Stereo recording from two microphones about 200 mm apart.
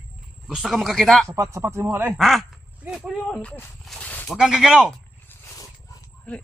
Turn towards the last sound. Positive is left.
turn(degrees=15)  # may be behind; listen again after turning